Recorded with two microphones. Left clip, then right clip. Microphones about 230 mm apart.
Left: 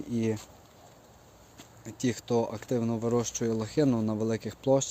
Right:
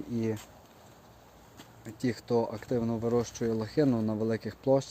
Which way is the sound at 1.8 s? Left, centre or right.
Centre.